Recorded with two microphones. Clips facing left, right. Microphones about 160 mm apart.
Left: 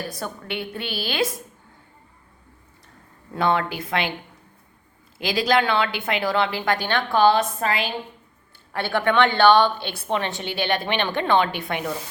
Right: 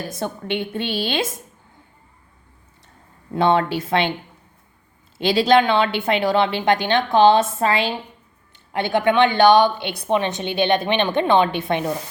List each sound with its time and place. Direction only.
0.1 s a woman's voice: 25° right (ahead or behind)
3.3 s a woman's voice: 25° right (ahead or behind)
5.1 s a woman's voice: 25° right (ahead or behind)